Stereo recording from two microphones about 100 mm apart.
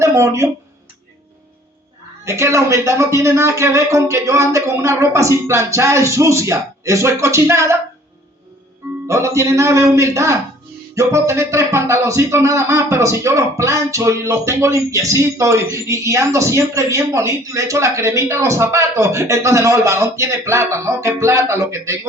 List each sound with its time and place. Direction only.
0.0 s speech: 30° right (ahead or behind)
2.2 s speech: 30° right (ahead or behind)
9.0 s speech: 30° right (ahead or behind)